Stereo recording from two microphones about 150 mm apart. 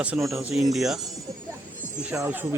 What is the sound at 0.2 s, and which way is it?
Speech, 20° right (ahead or behind).